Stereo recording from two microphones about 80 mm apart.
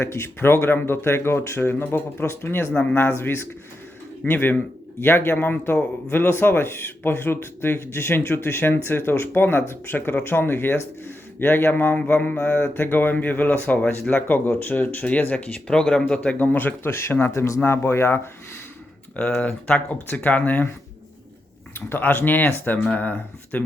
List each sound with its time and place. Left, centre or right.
0.0 s a man's voice: left
19.1 s a man's voice: centre
21.8 s a man's voice: left